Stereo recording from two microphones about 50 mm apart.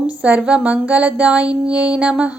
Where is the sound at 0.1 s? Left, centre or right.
Right.